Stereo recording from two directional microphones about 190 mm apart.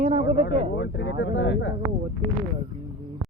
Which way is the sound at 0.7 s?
70° left (ahead or behind).